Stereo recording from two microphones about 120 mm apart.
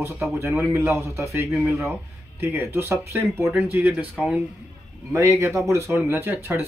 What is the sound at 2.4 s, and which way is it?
Speech, 15° right (ahead or behind).